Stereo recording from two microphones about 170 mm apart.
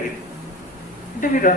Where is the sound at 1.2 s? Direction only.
50° left (ahead or behind).